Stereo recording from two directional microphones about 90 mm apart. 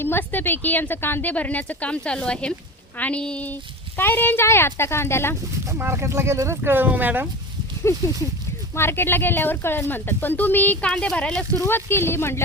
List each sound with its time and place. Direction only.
0.0 s a woman's voice: 25° left (ahead or behind)
5.6 s speech: 30° right (ahead or behind)
6.6 s speech: 20° right (ahead or behind)
7.9 s speech: 30° left (ahead or behind)
10.8 s a woman's voice: 10° left (ahead or behind)
11.5 s speech: 30° left (ahead or behind)